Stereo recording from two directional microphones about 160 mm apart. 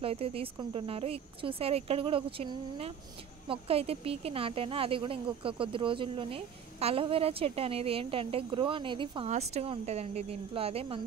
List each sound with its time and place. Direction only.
0.0 s speech: 35° right (ahead or behind)
9.3 s speech: 40° right (ahead or behind)